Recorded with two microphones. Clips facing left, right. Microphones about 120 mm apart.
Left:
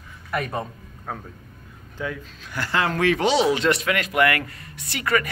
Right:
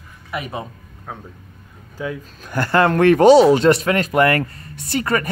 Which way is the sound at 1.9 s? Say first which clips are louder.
Right 3 dB; 15° right (ahead or behind).